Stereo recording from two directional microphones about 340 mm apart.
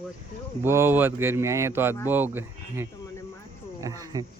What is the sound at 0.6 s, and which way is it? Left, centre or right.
Speech, centre.